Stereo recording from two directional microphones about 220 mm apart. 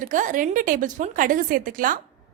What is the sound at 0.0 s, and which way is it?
A woman's voice, 35° right (ahead or behind).